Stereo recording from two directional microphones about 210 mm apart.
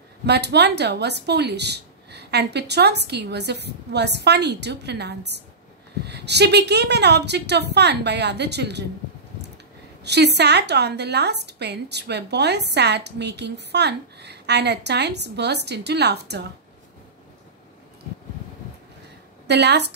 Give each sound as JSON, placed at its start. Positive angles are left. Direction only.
{"t": 0.3, "sound": "a woman's voice", "side_deg": -55}
{"t": 10.0, "sound": "a woman's voice", "side_deg": -55}
{"t": 19.4, "sound": "a woman's voice", "side_deg": -55}